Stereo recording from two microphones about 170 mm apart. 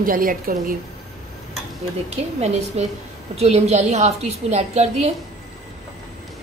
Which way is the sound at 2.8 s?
40° right (ahead or behind).